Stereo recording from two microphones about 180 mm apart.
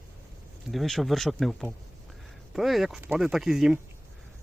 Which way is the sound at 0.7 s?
Centre (ahead or behind).